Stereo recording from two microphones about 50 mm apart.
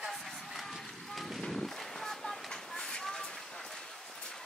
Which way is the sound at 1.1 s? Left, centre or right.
Centre.